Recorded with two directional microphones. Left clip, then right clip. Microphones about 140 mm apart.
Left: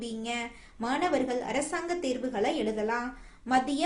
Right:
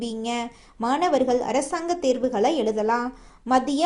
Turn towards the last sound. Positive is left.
turn(degrees=-40)  # may be behind; listen again after turning